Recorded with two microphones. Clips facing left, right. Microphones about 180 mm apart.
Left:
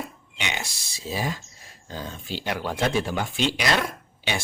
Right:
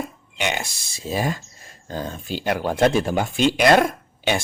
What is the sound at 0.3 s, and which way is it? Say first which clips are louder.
Speech: right 7 dB; 50° right (ahead or behind).